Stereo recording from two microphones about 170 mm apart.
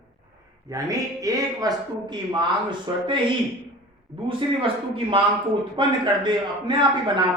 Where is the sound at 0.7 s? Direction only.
20° right (ahead or behind).